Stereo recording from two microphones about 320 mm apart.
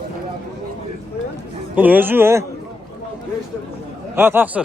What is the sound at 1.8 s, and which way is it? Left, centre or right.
Speech, centre.